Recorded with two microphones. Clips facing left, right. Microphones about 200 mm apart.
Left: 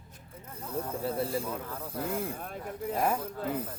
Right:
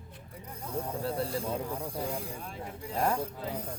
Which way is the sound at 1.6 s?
15° right (ahead or behind).